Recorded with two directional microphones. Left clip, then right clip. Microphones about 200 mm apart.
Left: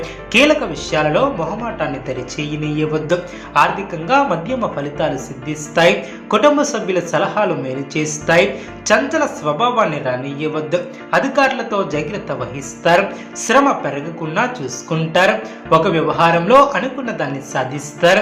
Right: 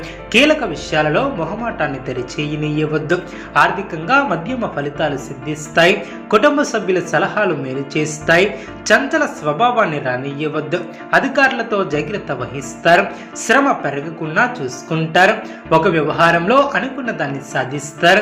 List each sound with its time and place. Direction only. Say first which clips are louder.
0.3 s speech: even; 10° right (ahead or behind)